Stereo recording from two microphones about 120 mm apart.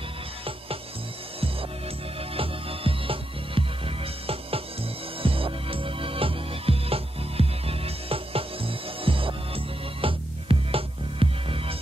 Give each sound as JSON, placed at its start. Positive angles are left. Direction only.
{"t": 2.3, "sound": "music", "side_deg": -50}